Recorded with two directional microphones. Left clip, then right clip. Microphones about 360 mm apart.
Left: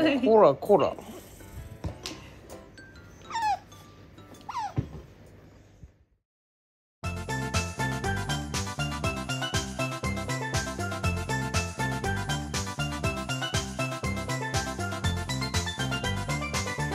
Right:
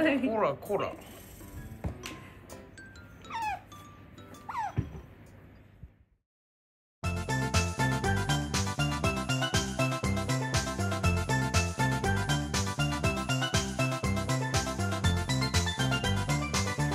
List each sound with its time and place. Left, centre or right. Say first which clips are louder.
0.0 s a woman's voice: left 8 dB; left
3.3 s dog: left 6 dB; left
7.0 s music: even; centre